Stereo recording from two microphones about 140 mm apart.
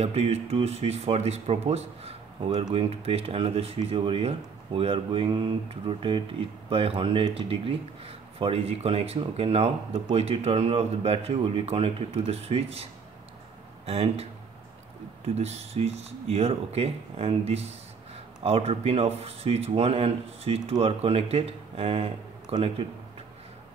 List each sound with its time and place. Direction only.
0.0 s speech: 45° right (ahead or behind)
13.8 s speech: 45° right (ahead or behind)
15.3 s speech: 50° right (ahead or behind)